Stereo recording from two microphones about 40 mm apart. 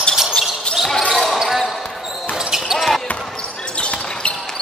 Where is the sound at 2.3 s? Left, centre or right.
Centre.